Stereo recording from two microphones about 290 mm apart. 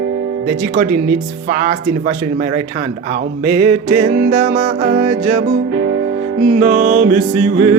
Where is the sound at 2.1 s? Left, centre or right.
Right.